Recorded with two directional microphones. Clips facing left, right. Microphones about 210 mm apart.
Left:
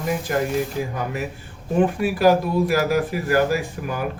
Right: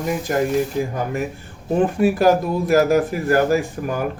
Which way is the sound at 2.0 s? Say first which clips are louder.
Right 4 dB; 45° right (ahead or behind).